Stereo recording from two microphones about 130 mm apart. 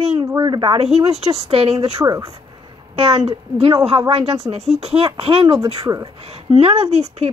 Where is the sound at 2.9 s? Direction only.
50° right (ahead or behind).